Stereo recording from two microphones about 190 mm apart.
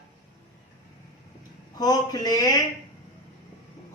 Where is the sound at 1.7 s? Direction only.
20° left (ahead or behind).